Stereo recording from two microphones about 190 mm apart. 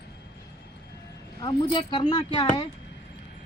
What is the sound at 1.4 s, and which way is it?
Speech, 25° left (ahead or behind).